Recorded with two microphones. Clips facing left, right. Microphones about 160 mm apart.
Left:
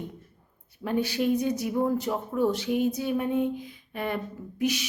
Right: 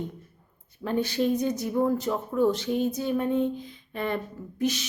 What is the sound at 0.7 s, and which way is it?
Speech, 10° left (ahead or behind).